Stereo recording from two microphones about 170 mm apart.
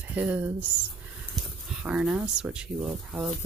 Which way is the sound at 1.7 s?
5° right (ahead or behind).